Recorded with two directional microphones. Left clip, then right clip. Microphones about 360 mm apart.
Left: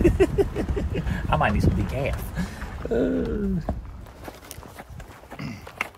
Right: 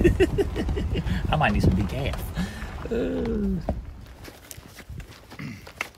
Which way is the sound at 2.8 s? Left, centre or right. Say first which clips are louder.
Left 4 dB; centre.